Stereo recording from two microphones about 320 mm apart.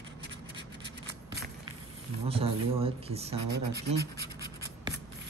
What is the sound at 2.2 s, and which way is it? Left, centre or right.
Speech, centre.